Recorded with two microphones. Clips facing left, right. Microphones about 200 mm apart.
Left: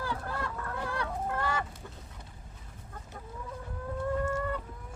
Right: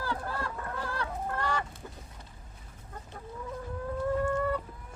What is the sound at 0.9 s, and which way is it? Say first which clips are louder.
Fowl: left 2 dB; 10° left (ahead or behind).